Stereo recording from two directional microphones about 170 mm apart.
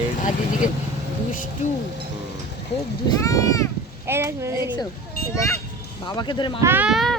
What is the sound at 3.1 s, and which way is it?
Speech, 20° left (ahead or behind).